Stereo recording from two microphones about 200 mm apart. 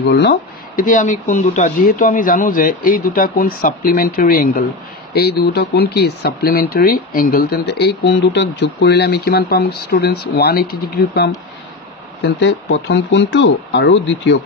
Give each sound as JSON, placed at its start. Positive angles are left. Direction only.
{"t": 0.1, "sound": "speech", "side_deg": 55}
{"t": 12.2, "sound": "speech", "side_deg": 60}